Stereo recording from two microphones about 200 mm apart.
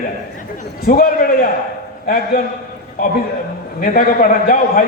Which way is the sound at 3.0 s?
45° left (ahead or behind).